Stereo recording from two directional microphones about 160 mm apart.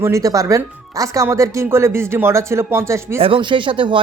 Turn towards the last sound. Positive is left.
turn(degrees=-30)  # may be behind; listen again after turning